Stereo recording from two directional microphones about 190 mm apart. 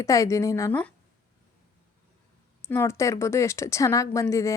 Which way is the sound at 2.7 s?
15° left (ahead or behind).